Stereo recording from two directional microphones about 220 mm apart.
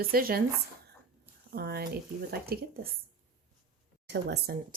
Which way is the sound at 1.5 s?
45° right (ahead or behind).